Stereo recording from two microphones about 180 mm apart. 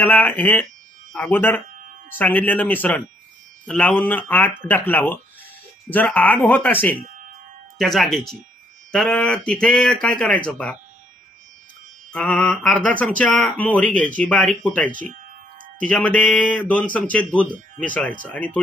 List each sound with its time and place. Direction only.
0.0 s speech: 10° left (ahead or behind)
12.1 s speech: 5° left (ahead or behind)